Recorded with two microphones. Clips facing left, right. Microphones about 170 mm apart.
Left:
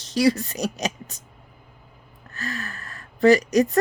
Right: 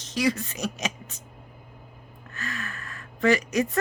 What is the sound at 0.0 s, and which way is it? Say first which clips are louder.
Speech: left 6 dB; 35° left (ahead or behind).